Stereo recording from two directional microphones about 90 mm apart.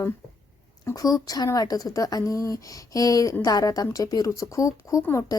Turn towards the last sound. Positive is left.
turn(degrees=35)  # may be behind; listen again after turning